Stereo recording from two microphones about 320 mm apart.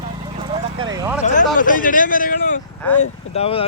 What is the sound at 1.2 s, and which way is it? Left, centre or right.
Speech, left.